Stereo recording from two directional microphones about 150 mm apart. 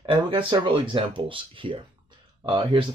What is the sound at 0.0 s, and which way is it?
Speech, 35° right (ahead or behind).